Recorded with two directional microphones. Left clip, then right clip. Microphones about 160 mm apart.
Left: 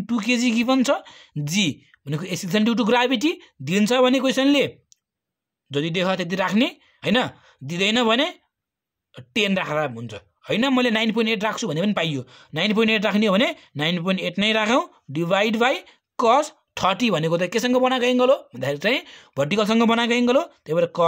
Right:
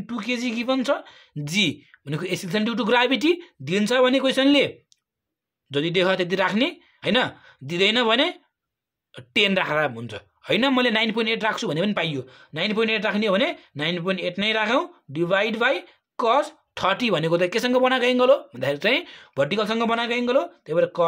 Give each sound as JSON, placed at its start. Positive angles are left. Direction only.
{"t": 0.0, "sound": "speech", "side_deg": 50}